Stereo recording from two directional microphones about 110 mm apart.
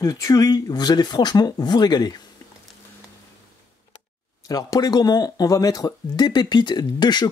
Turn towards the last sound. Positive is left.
turn(degrees=40)  # may be behind; listen again after turning